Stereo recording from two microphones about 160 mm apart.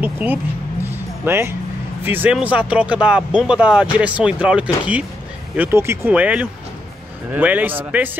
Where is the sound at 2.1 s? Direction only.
10° right (ahead or behind).